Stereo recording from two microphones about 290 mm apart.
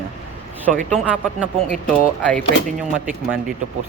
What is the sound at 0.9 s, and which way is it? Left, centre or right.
Speech, centre.